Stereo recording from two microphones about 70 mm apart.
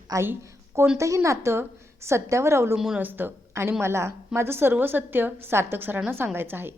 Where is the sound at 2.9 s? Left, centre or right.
Right.